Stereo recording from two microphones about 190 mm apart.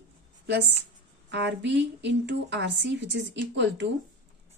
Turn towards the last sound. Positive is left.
turn(degrees=-70)  # may be behind; listen again after turning